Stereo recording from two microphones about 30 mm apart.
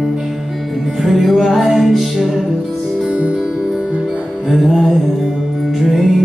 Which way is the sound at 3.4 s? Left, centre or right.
Right.